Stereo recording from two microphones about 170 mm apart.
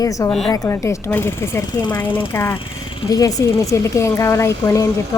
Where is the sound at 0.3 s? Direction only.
Centre (ahead or behind).